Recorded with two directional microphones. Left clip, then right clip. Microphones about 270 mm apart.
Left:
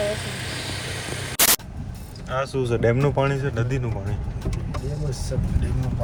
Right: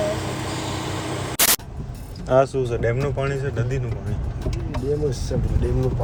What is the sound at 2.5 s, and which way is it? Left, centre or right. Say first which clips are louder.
Speech: left 1 dB; centre.